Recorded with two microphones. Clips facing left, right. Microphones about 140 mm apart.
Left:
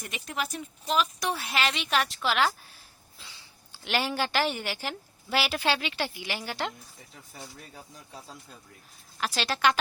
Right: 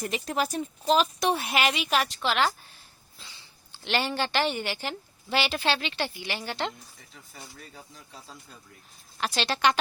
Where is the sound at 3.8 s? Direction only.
5° left (ahead or behind).